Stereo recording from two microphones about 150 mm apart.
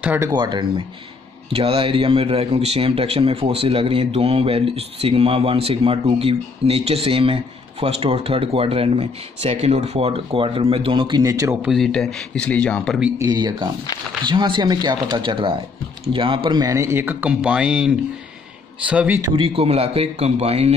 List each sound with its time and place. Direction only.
0.0 s speech: 10° right (ahead or behind)
0.3 s speech: 30° right (ahead or behind)
11.6 s speech: centre (ahead or behind)
13.2 s speech: 25° right (ahead or behind); by 19.2 s 10° right (ahead or behind)
19.3 s a man's voice: 40° right (ahead or behind)